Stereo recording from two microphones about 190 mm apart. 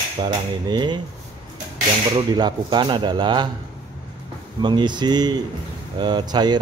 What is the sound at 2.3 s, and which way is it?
Speech, 25° right (ahead or behind).